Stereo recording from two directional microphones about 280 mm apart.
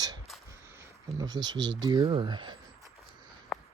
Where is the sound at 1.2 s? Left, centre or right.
Centre.